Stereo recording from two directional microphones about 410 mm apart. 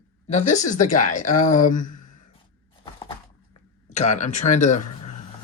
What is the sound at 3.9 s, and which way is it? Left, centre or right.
Speech, centre.